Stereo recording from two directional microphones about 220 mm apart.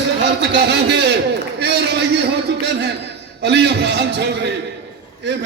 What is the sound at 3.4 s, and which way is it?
A man's voice, 50° right (ahead or behind).